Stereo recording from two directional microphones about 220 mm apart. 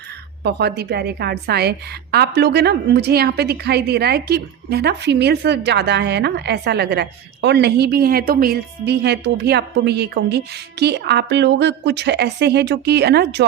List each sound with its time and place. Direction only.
0.4 s a woman's voice: 50° right (ahead or behind)